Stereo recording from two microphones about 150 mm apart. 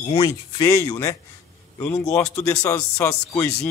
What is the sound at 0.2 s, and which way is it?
Speech, 25° left (ahead or behind).